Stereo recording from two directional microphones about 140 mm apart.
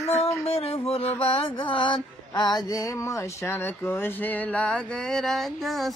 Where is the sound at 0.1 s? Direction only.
45° left (ahead or behind).